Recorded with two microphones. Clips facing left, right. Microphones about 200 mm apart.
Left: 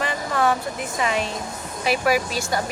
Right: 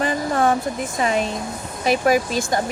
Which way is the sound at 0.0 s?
35° right (ahead or behind).